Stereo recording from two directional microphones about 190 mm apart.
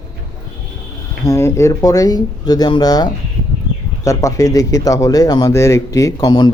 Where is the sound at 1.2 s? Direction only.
15° left (ahead or behind).